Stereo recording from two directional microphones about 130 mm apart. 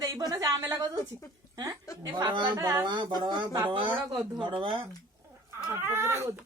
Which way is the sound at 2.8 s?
35° right (ahead or behind).